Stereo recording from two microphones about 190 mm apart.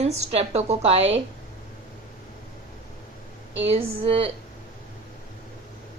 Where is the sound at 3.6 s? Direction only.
30° right (ahead or behind).